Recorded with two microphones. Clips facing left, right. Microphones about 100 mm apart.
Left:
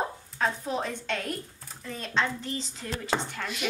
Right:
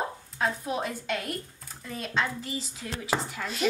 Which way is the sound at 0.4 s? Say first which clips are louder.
Even; 5° right (ahead or behind).